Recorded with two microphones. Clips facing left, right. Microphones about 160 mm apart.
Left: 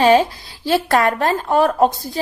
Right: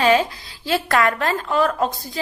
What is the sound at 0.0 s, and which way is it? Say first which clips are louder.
A woman's voice: left 4 dB; 30° left (ahead or behind).